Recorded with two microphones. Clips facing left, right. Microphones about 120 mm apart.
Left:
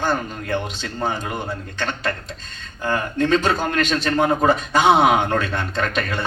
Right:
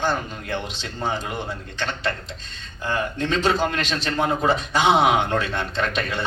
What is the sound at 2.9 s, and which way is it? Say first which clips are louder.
A man's voice: left 5 dB; 45° left (ahead or behind).